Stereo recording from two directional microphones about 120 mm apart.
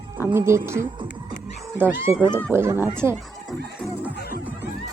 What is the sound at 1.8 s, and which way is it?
Speech, 20° right (ahead or behind).